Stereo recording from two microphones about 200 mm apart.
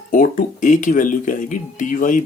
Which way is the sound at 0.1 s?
40° left (ahead or behind).